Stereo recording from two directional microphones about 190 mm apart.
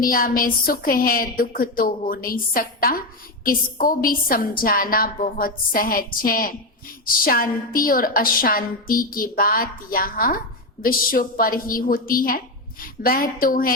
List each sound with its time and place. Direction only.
0.0 s a woman's voice: 50° left (ahead or behind)